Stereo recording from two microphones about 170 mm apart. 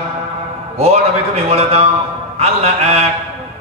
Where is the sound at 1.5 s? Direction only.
35° right (ahead or behind).